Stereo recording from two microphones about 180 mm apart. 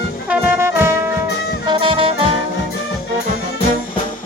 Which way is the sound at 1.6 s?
25° right (ahead or behind).